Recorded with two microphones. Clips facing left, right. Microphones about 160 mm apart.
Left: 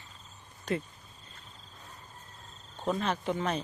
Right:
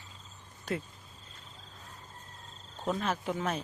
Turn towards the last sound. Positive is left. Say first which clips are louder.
# left 2 dB
turn(degrees=-5)  # may be behind; listen again after turning